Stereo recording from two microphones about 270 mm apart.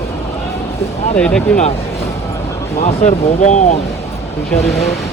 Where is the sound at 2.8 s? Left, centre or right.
Left.